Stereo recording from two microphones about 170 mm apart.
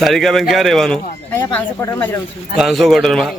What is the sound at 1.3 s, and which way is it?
Speech, 15° left (ahead or behind).